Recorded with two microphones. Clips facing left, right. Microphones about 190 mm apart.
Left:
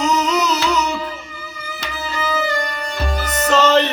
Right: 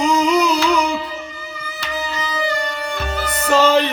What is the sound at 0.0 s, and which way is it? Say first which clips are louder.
Music: right 3 dB; 10° right (ahead or behind).